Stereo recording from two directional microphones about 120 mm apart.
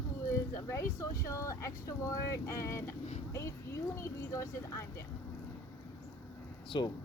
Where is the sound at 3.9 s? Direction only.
25° left (ahead or behind).